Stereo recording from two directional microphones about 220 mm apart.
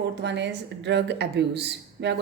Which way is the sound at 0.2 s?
50° right (ahead or behind).